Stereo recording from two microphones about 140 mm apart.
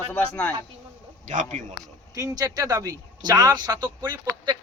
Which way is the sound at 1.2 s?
60° right (ahead or behind).